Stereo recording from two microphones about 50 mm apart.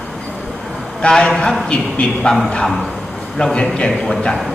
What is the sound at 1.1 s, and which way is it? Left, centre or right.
A man's voice, centre.